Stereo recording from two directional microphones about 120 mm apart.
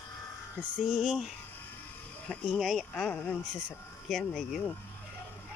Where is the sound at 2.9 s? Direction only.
10° left (ahead or behind).